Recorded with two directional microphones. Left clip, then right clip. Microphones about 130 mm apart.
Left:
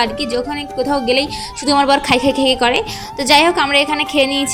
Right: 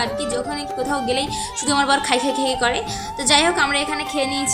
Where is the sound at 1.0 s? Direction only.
40° left (ahead or behind).